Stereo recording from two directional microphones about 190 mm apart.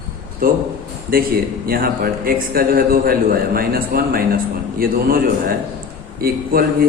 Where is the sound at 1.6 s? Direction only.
50° right (ahead or behind).